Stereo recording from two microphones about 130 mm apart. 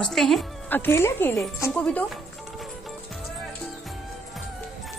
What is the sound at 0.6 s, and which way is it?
Speech, 15° left (ahead or behind).